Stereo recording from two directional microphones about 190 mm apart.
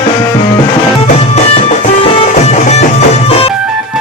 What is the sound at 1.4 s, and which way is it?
Music, 30° left (ahead or behind).